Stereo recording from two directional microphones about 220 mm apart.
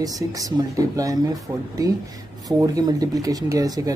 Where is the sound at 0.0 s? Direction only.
15° right (ahead or behind).